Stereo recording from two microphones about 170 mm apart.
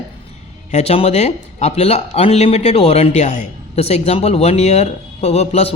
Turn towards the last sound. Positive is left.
turn(degrees=40)  # may be behind; listen again after turning